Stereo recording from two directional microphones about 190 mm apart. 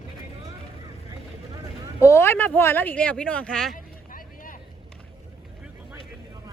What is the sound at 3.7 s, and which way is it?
Vehicle, 45° left (ahead or behind).